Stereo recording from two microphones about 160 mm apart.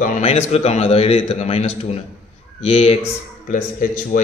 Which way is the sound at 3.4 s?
55° left (ahead or behind).